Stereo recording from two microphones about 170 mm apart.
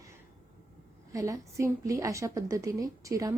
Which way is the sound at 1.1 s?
20° right (ahead or behind).